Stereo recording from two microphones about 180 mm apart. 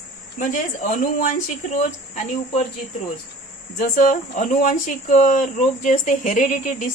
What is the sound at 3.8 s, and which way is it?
Speech, 50° left (ahead or behind).